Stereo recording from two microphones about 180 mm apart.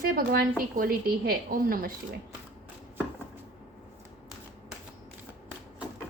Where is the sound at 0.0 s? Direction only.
55° right (ahead or behind).